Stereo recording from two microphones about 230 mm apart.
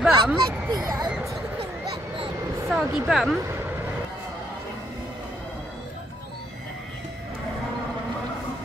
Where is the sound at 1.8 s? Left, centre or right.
Right.